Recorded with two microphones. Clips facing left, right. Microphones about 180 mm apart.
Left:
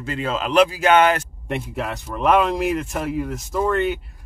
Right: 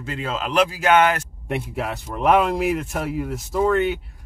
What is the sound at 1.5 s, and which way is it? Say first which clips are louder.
Speech: even; 5° right (ahead or behind).